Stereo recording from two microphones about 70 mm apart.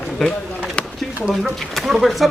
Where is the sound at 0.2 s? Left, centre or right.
Centre.